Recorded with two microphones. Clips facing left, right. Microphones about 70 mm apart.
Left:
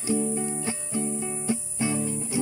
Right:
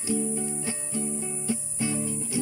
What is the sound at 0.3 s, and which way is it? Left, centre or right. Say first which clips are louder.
Music: left 2 dB; left.